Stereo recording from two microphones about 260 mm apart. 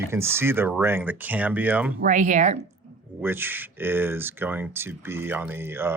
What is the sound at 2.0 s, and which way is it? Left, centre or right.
Speech, right.